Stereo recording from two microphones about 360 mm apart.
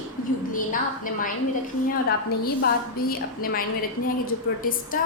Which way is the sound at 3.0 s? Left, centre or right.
Left.